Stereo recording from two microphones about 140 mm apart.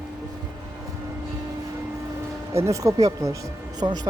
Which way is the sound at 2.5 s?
20° right (ahead or behind).